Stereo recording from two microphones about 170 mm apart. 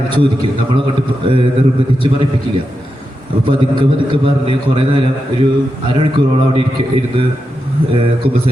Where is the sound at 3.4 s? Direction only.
30° right (ahead or behind).